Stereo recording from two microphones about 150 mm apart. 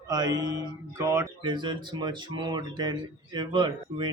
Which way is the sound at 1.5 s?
30° right (ahead or behind).